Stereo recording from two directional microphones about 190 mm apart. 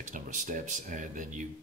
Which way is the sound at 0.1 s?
45° right (ahead or behind).